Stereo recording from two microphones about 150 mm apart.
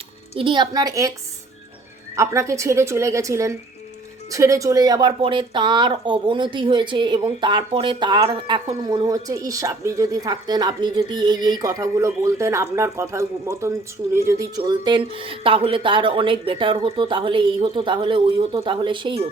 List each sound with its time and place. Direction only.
0.3 s speech: 35° right (ahead or behind)
2.1 s speech: 20° right (ahead or behind)
14.6 s speech: 30° right (ahead or behind)